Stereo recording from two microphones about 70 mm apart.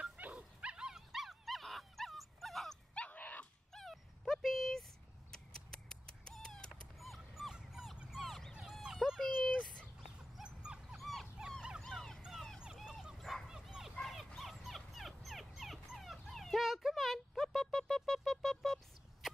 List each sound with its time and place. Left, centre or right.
0.0 s dog: centre
2.9 s dog: left
3.7 s dog: centre
5.3 s cat: centre
7.0 s dog: centre
9.6 s a sound: centre
10.3 s dog: centre
11.0 s dog: centre
13.2 s bow-wow: centre
13.5 s bow-wow: centre
14.0 s dog: centre